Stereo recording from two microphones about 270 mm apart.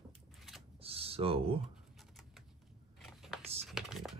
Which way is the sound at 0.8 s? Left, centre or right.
Right.